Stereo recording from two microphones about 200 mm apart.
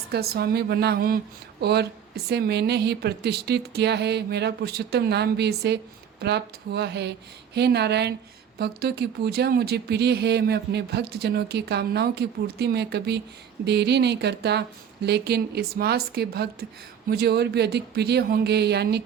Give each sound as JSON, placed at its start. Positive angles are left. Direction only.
{"t": 0.1, "sound": "a woman's voice", "side_deg": -50}